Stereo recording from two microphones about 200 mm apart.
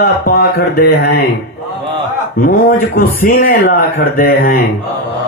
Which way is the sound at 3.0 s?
45° left (ahead or behind).